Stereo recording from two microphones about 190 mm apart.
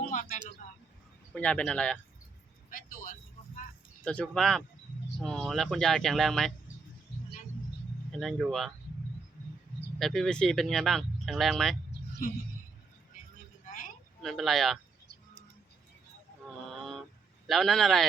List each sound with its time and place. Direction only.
0.1 s a sound: 40° left (ahead or behind)
1.3 s speech: 5° left (ahead or behind)
2.6 s vehicle: 45° left (ahead or behind)
4.0 s speech: 5° left (ahead or behind)
8.1 s speech: centre (ahead or behind)
10.0 s speech: centre (ahead or behind)
12.2 s speech: 45° left (ahead or behind)
14.2 s speech: centre (ahead or behind)
17.4 s speech: centre (ahead or behind)